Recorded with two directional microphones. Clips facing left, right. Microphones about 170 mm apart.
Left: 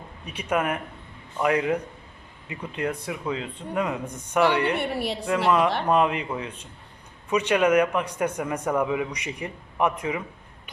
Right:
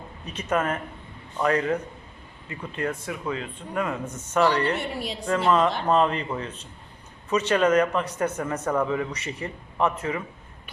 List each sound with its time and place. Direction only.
0.3 s a man's voice: 10° left (ahead or behind)
4.8 s a woman's voice: 65° left (ahead or behind)
5.8 s a man's voice: 10° left (ahead or behind)